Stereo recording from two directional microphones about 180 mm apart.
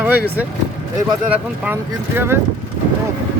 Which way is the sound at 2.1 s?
15° right (ahead or behind).